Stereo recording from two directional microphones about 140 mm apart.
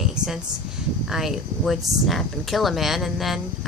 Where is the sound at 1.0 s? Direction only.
Centre (ahead or behind).